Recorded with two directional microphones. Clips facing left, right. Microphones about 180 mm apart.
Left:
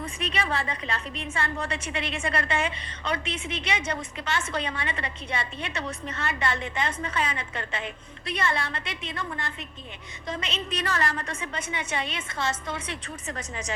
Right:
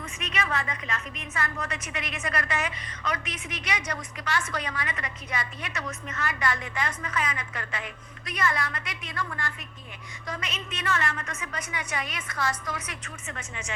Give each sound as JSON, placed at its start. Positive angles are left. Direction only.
{"t": 0.0, "sound": "a woman's voice", "side_deg": 30}